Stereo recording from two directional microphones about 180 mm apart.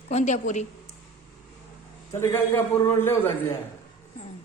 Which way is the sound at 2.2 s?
15° left (ahead or behind).